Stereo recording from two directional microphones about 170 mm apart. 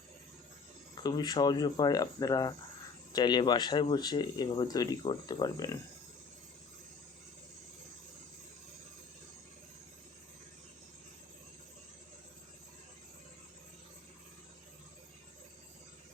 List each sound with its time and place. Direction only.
1.0 s speech: 25° left (ahead or behind)